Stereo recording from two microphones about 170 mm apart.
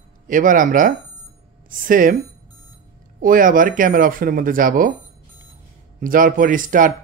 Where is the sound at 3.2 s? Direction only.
55° right (ahead or behind).